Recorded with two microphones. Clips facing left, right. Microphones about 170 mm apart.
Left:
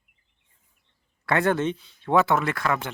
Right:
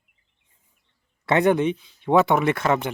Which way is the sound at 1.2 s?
20° right (ahead or behind).